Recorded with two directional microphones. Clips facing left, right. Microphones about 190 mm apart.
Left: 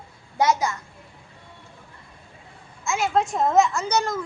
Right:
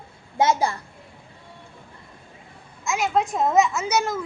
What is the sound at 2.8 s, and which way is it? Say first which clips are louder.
A woman's voice: even; centre (ahead or behind).